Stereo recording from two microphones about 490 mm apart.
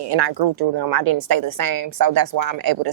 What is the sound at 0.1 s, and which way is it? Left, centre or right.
A woman's voice, right.